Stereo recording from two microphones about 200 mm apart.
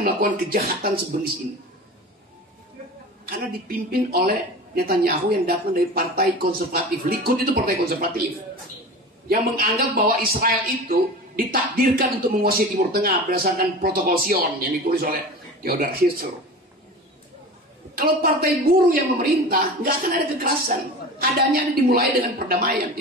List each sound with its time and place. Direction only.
0.0 s a man's voice: 45° right (ahead or behind)
3.3 s a man's voice: 45° right (ahead or behind)
9.3 s a man's voice: 45° right (ahead or behind)
17.9 s a man's voice: 50° right (ahead or behind)